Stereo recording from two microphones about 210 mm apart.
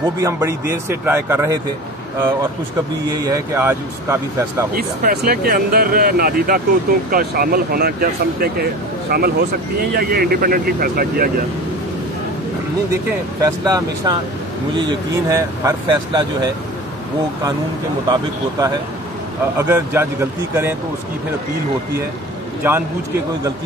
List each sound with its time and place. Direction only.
0.2 s speech: 15° right (ahead or behind)
3.1 s speech: 15° right (ahead or behind)
4.7 s speech: 45° right (ahead or behind)
13.4 s speech: 15° right (ahead or behind)
18.0 s speech: 20° right (ahead or behind)
19.7 s speech: 10° right (ahead or behind)
22.6 s speech: 10° right (ahead or behind)